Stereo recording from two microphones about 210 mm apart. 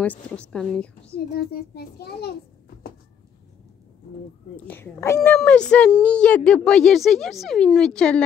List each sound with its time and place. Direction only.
0.0 s a woman's voice: 5° left (ahead or behind)
1.1 s a child's voice: 50° left (ahead or behind)
4.6 s a woman's voice: 10° left (ahead or behind)